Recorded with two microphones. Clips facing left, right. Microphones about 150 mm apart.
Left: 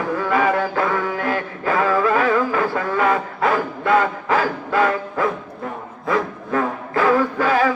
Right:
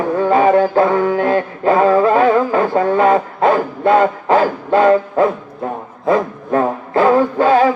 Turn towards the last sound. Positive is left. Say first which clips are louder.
# right 6 dB
turn(degrees=-30)  # may be behind; listen again after turning